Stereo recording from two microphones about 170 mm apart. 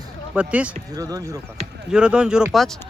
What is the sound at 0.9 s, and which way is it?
Speech, 20° right (ahead or behind).